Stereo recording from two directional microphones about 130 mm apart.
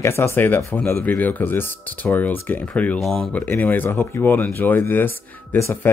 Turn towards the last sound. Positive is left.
turn(degrees=20)  # may be behind; listen again after turning